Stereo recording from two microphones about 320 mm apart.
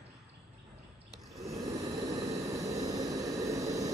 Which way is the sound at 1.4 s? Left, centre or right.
Centre.